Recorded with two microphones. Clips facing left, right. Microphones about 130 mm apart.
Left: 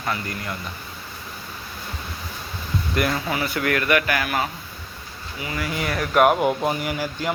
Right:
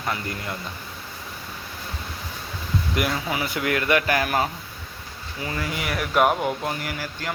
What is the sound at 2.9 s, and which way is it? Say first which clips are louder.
Speech: left 3 dB; 10° right (ahead or behind).